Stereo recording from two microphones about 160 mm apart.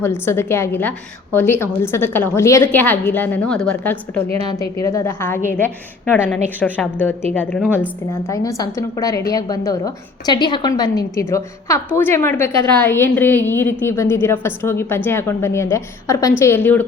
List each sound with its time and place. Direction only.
0.0 s a woman's voice: 15° left (ahead or behind)
4.4 s a woman's voice: 20° left (ahead or behind); by 7.7 s 5° left (ahead or behind)
8.3 s a woman's voice: 20° left (ahead or behind)